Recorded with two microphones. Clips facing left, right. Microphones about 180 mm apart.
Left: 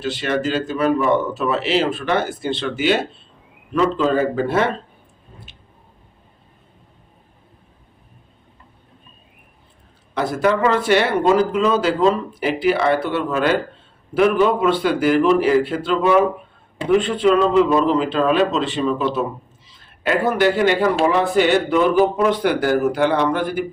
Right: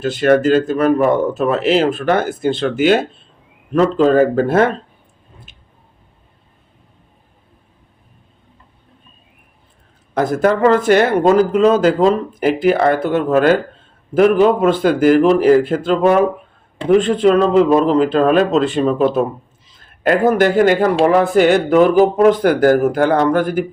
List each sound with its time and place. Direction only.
0.0 s a man's voice: 50° right (ahead or behind)
10.2 s a man's voice: 45° right (ahead or behind)